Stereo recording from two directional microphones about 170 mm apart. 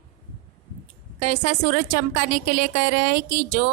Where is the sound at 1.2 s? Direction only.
45° right (ahead or behind).